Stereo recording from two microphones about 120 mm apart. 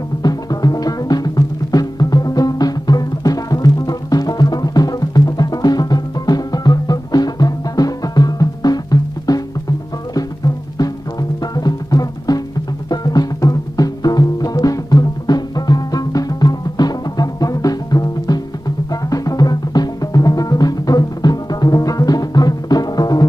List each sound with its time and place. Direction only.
0.2 s music: 30° left (ahead or behind)